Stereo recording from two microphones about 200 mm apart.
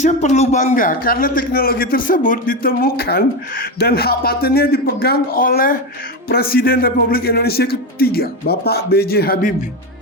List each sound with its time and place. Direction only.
0.0 s a man's voice: 35° left (ahead or behind)